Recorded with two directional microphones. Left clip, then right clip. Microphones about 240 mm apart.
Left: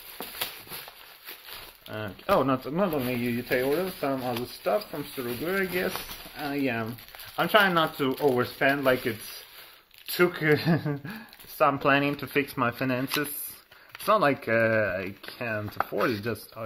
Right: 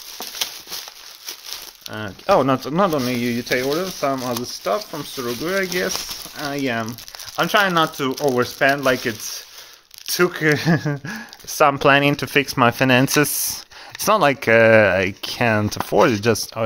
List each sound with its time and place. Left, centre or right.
1.9 s speech: right
10.1 s speech: right